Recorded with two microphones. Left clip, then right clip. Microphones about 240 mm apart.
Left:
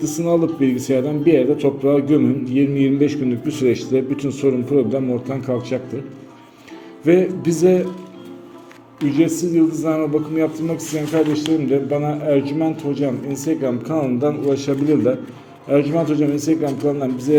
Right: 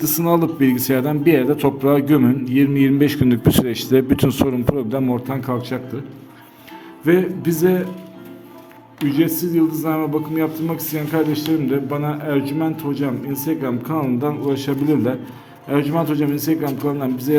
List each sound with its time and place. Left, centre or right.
0.0 s a man's voice: right
7.0 s a man's voice: centre
9.0 s a man's voice: centre